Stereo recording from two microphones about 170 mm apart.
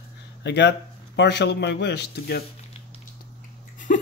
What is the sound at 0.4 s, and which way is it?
Speech, 90° left.